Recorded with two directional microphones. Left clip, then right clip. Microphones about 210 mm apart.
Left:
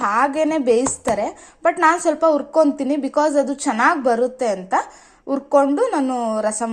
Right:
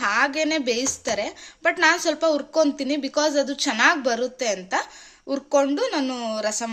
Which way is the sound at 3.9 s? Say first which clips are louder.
Left 5 dB; 20° right (ahead or behind).